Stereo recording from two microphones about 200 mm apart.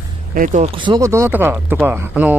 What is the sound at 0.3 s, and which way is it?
Speech, 40° right (ahead or behind).